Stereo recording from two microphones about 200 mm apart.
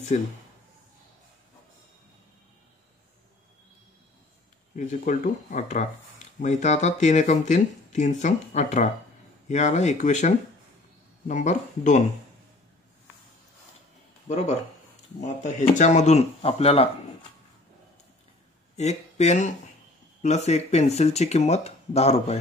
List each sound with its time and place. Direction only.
0.1 s speech: 35° left (ahead or behind)
4.7 s speech: 40° left (ahead or behind)
14.2 s speech: 35° left (ahead or behind)
18.8 s speech: 35° left (ahead or behind)